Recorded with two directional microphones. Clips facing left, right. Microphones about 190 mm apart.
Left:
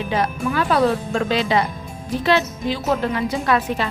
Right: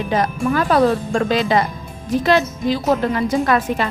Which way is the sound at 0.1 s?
45° right (ahead or behind).